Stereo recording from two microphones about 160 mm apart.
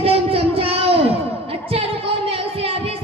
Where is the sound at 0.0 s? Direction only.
35° right (ahead or behind).